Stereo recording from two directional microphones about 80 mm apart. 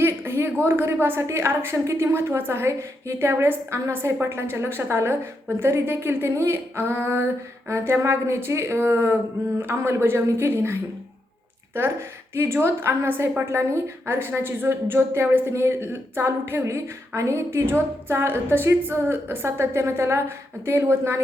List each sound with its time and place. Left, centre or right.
0.0 s a woman's voice: right
12.3 s a woman's voice: right